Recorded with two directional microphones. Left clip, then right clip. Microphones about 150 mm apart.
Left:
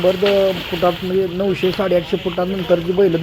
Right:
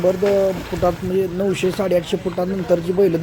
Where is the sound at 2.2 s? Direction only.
Centre (ahead or behind).